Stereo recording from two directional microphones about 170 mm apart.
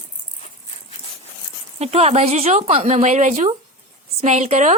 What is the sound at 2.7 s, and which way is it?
Female singing, 40° right (ahead or behind).